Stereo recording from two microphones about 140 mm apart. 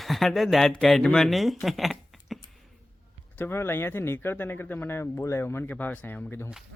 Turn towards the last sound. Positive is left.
turn(degrees=15)  # may be behind; listen again after turning